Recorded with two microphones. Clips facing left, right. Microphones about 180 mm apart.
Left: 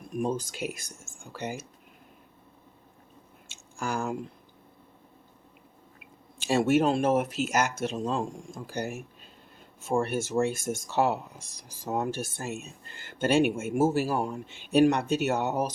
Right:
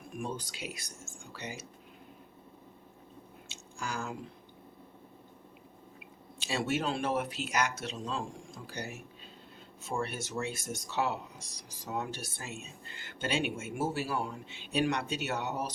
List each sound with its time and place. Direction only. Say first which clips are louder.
0.1 s speech: left 9 dB; 40° left (ahead or behind)
3.5 s squish: left 7 dB; 55° left (ahead or behind)
6.4 s speech: left 9 dB; 50° left (ahead or behind)